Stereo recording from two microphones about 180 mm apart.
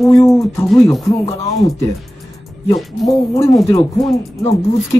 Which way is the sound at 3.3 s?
20° left (ahead or behind).